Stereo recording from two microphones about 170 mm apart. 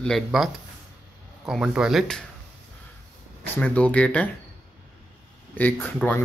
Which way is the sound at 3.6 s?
5° left (ahead or behind).